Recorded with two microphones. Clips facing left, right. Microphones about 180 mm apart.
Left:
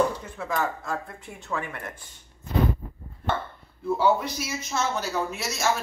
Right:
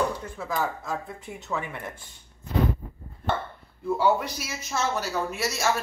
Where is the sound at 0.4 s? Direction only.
5° right (ahead or behind).